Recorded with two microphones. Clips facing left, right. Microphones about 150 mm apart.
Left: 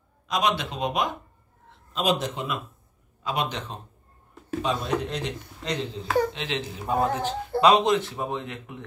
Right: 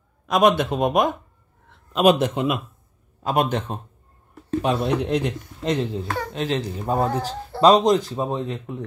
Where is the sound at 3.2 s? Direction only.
50° right (ahead or behind).